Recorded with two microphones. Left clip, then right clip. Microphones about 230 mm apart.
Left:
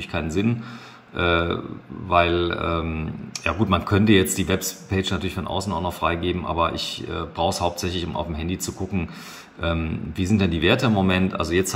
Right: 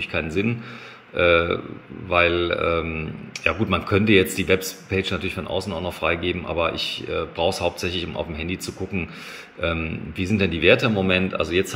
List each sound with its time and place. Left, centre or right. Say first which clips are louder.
0.0 s speech: right 1 dB; centre